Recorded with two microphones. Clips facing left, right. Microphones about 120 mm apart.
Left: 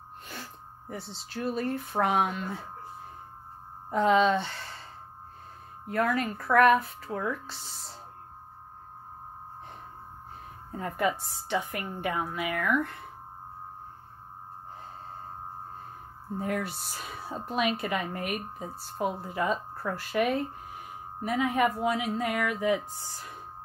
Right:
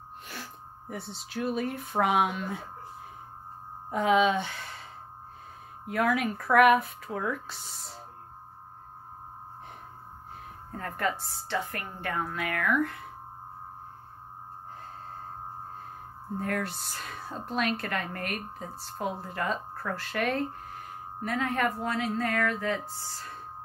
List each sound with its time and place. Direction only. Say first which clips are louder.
0.3 s speech: even; centre (ahead or behind)
3.9 s speech: left 1 dB; 5° right (ahead or behind)
5.9 s speech: right 1 dB; 5° right (ahead or behind)
10.7 s a woman's voice: left 2 dB; 10° left (ahead or behind)
16.3 s a woman's voice: even; 5° left (ahead or behind)